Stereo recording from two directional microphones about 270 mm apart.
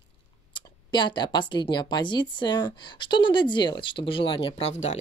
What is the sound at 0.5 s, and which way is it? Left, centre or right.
Speech, centre.